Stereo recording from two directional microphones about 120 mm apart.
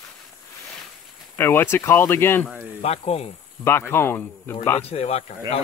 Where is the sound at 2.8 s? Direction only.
60° left (ahead or behind).